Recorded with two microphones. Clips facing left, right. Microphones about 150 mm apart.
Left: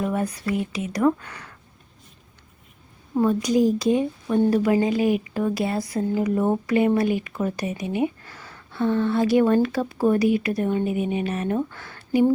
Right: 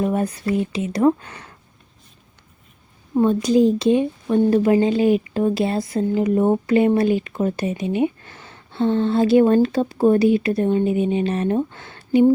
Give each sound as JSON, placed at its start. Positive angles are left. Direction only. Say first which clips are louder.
{"t": 0.0, "sound": "speech", "louder": "right 4 dB", "side_deg": -25}
{"t": 3.2, "sound": "speech", "louder": "right 4 dB", "side_deg": -25}